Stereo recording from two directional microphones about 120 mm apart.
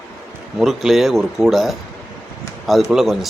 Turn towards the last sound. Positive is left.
turn(degrees=0)  # may be behind; listen again after turning